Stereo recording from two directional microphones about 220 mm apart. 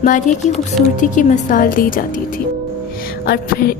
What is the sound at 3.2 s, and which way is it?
Speech, 40° left (ahead or behind).